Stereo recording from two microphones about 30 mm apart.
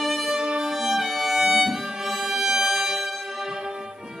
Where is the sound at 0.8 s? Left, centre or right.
Centre.